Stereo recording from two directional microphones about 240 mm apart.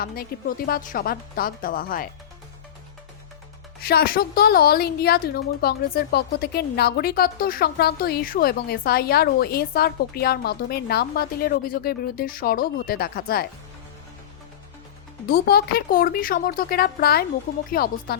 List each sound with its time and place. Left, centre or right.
0.0 s a woman's voice: left
3.8 s a woman's voice: left
15.3 s a woman's voice: left